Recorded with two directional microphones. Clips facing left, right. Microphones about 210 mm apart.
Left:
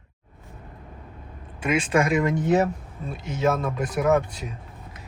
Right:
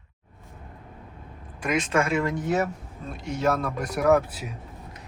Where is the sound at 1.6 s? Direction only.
10° left (ahead or behind).